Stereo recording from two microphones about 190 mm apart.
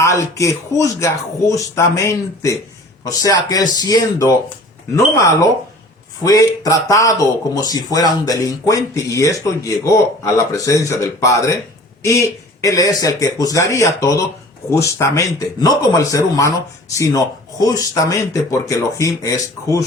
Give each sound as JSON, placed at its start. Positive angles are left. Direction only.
{"t": 0.0, "sound": "speech", "side_deg": 15}